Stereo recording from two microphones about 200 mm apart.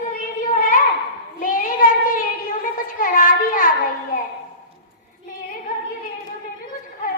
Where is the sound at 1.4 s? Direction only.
45° left (ahead or behind).